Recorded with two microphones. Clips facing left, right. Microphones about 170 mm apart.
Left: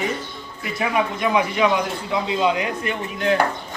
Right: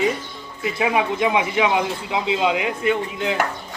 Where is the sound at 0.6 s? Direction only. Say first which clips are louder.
Right 2 dB; 20° right (ahead or behind).